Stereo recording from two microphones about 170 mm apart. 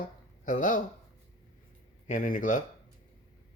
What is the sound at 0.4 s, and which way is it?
Speech, 50° left (ahead or behind).